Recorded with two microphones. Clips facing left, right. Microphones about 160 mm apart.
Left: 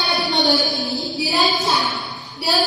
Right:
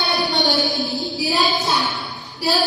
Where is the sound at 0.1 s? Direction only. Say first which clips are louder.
Left 3 dB; centre (ahead or behind).